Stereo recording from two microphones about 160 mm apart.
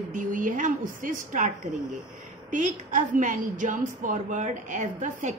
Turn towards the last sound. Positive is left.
turn(degrees=-50)  # may be behind; listen again after turning